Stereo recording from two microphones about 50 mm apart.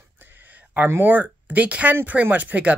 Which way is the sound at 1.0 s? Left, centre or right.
Right.